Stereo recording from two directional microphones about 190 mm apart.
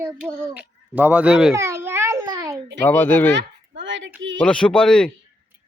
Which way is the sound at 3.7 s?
70° right (ahead or behind).